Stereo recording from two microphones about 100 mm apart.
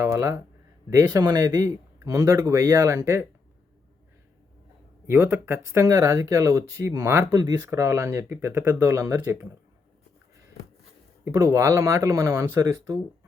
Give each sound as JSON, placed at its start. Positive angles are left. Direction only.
{"t": 0.0, "sound": "speech", "side_deg": -30}
{"t": 5.0, "sound": "speech", "side_deg": -25}
{"t": 7.3, "sound": "speech", "side_deg": -35}
{"t": 11.3, "sound": "speech", "side_deg": -30}